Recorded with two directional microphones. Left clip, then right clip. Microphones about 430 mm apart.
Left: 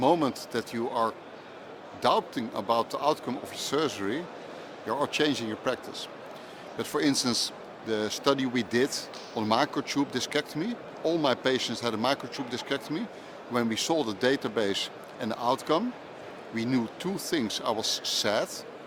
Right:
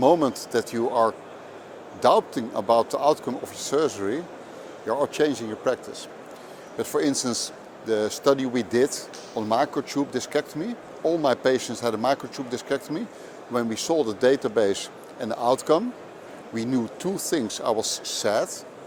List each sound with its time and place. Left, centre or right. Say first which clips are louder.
0.0 s speech: right 5 dB; right